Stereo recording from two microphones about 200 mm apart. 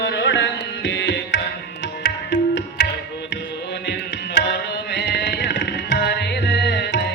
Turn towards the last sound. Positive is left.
turn(degrees=60)  # may be behind; listen again after turning